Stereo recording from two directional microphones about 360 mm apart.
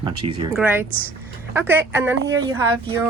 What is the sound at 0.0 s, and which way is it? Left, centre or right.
Speech, centre.